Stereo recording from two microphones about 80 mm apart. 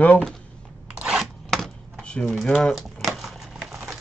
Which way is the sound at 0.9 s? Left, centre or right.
Centre.